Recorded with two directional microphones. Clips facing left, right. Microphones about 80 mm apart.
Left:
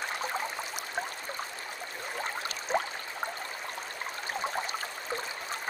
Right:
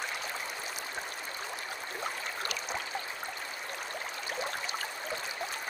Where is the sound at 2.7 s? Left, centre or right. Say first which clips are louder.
Left 9 dB; left.